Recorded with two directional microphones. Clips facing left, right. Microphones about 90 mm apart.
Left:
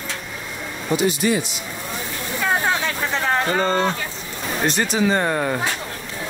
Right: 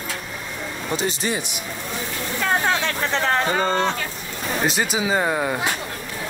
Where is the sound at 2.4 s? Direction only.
5° left (ahead or behind).